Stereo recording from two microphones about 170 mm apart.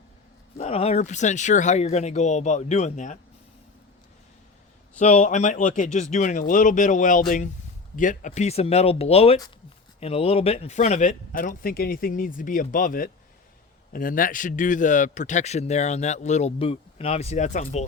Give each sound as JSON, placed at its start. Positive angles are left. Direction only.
{"t": 0.5, "sound": "a man's voice", "side_deg": 40}
{"t": 4.9, "sound": "a man's voice", "side_deg": 45}